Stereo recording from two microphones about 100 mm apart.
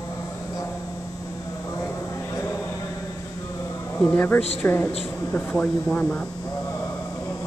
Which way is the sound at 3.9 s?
20° left (ahead or behind).